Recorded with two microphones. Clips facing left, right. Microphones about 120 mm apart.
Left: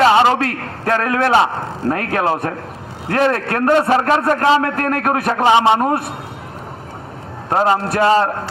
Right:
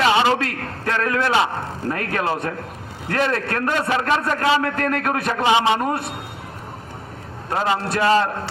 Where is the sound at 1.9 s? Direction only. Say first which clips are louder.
Left 5 dB; 40° left (ahead or behind).